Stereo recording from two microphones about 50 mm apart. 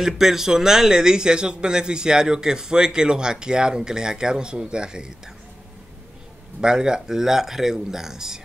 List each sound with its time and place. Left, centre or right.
0.0 s speech: centre
6.6 s speech: centre